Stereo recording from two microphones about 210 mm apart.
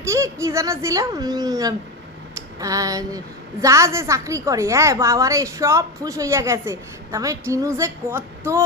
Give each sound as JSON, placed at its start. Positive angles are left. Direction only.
{"t": 0.0, "sound": "a woman's voice", "side_deg": -15}